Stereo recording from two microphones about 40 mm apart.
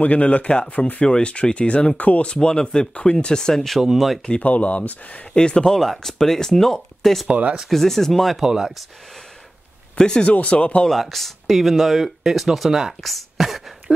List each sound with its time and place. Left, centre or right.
0.0 s speech: left
2.0 s speech: left
2.2 s speech: left
4.4 s speech: left
5.3 s speech: left
5.8 s speech: centre
8.4 s speech: centre
9.9 s speech: left
10.9 s speech: centre
13.9 s a sound: right